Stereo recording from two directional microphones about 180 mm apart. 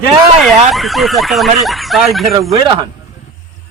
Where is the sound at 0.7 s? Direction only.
Centre (ahead or behind).